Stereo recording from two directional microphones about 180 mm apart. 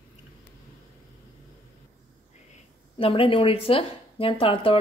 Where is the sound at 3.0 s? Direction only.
30° left (ahead or behind).